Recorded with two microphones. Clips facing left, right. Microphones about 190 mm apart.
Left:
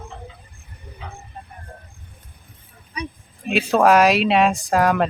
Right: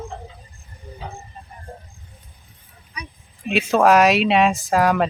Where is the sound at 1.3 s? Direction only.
60° left (ahead or behind).